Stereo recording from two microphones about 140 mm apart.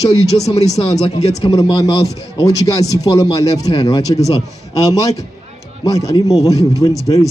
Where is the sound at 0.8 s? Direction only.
45° left (ahead or behind).